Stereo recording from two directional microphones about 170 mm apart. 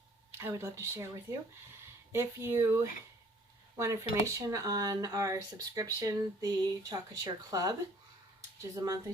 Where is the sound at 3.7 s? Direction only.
15° right (ahead or behind).